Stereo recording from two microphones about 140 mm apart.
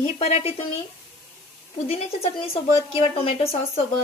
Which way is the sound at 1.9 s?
45° left (ahead or behind).